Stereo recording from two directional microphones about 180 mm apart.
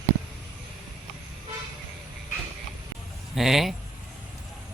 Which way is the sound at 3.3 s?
Centre (ahead or behind).